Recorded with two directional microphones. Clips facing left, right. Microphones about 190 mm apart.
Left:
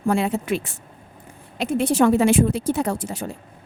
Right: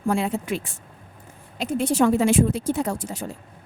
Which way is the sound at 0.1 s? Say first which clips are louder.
Left 3 dB; 70° left (ahead or behind).